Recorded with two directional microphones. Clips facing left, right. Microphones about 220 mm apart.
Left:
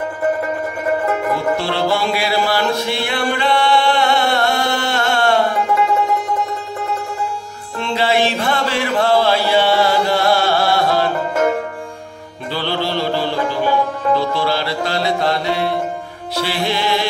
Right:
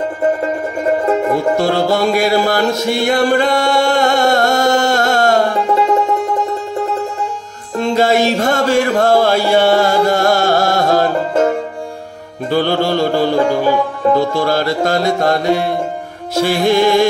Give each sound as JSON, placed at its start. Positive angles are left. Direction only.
{"t": 1.3, "sound": "music", "side_deg": -45}
{"t": 7.8, "sound": "mantra", "side_deg": -45}
{"t": 12.4, "sound": "music", "side_deg": -45}